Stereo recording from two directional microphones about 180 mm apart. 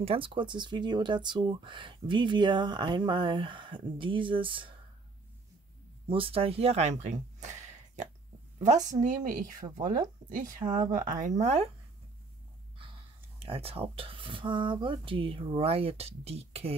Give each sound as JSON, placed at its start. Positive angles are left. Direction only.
{"t": 0.0, "sound": "speech", "side_deg": -30}
{"t": 6.0, "sound": "a woman's voice", "side_deg": -30}
{"t": 10.6, "sound": "speech", "side_deg": -20}
{"t": 11.1, "sound": "speech", "side_deg": -40}
{"t": 13.4, "sound": "speech", "side_deg": -30}